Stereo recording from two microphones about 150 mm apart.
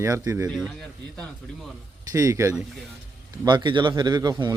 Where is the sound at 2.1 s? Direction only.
20° right (ahead or behind).